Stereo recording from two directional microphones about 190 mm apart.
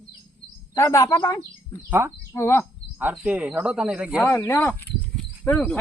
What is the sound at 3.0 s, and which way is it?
Speech, 10° right (ahead or behind).